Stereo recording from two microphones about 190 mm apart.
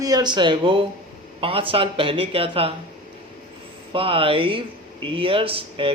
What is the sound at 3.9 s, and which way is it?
Mantra, 30° right (ahead or behind).